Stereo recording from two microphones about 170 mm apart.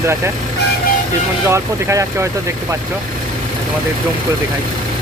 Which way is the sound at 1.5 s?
15° right (ahead or behind).